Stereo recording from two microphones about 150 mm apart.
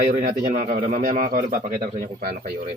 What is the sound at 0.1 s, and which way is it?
A man's voice, 70° right (ahead or behind).